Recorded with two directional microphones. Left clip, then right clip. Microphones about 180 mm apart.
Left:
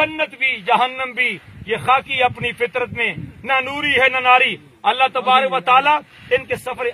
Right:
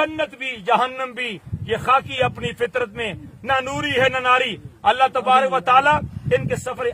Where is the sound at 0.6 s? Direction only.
20° right (ahead or behind).